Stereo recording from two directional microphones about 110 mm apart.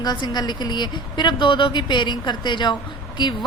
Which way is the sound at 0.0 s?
40° left (ahead or behind).